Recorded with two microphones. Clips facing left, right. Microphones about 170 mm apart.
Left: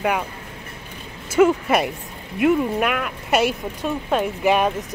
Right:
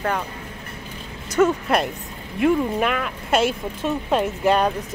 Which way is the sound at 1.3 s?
5° left (ahead or behind).